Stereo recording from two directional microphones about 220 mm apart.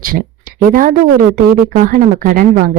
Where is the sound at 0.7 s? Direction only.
40° right (ahead or behind).